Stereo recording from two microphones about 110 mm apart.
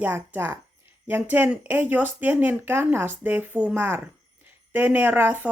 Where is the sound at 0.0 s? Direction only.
20° right (ahead or behind).